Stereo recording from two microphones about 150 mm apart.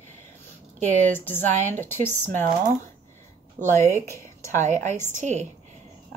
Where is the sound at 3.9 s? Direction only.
15° left (ahead or behind).